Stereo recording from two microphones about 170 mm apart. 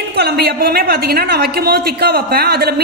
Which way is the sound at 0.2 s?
70° right (ahead or behind).